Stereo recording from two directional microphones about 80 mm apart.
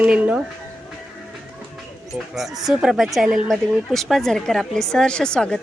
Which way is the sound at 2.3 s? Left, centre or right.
Centre.